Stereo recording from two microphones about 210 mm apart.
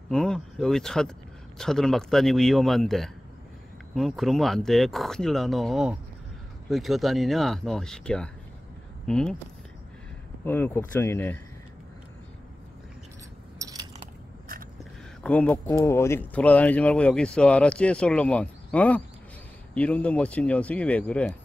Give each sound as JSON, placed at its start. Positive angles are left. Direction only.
{"t": 0.1, "sound": "speech", "side_deg": 0}
{"t": 10.4, "sound": "speech", "side_deg": 10}
{"t": 13.6, "sound": "mechanisms", "side_deg": -15}
{"t": 15.2, "sound": "speech", "side_deg": 5}